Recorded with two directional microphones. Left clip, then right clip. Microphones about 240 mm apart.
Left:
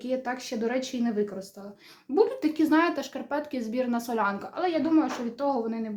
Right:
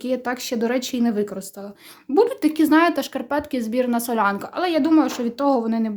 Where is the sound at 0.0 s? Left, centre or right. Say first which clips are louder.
Right 6 dB; right.